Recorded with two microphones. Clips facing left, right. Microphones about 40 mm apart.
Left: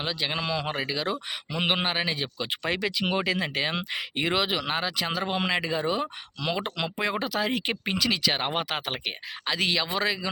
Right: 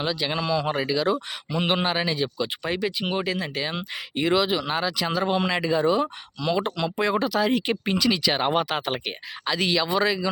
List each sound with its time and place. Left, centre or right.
0.0 s speech: centre
0.3 s speech: left
2.5 s speech: left
3.9 s speech: left
4.7 s speech: left
4.9 s speech: centre
5.3 s speech: left
5.5 s speech: centre
6.4 s speech: left
7.0 s speech: centre